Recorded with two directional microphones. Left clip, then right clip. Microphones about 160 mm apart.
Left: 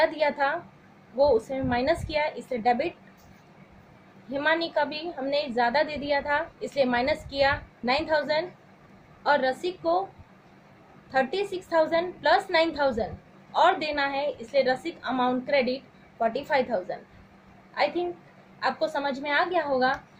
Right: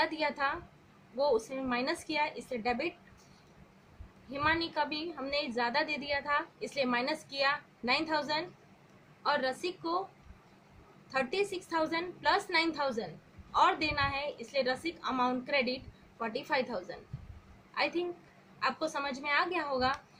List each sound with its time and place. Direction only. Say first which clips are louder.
0.0 s a woman's voice: left 8 dB; 35° right (ahead or behind)
1.7 s a woman's voice: left 8 dB; 35° right (ahead or behind)
4.3 s a woman's voice: left 6 dB; 35° right (ahead or behind)
11.1 s a woman's voice: left 6 dB; 35° right (ahead or behind)
18.6 s a woman's voice: left 6 dB; 35° right (ahead or behind)